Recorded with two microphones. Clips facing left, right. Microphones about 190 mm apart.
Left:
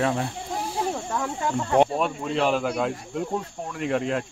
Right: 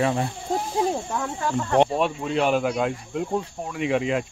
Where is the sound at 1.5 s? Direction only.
5° left (ahead or behind).